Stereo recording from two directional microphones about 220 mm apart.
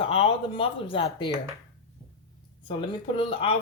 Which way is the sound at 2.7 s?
20° left (ahead or behind).